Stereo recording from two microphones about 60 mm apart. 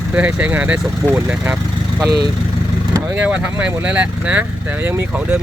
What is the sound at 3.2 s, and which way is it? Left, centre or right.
Speech, right.